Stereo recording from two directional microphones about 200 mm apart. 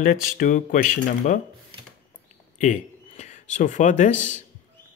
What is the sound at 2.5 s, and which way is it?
Speech, 35° left (ahead or behind).